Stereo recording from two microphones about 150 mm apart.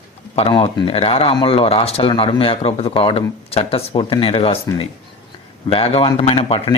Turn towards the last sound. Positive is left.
turn(degrees=40)  # may be behind; listen again after turning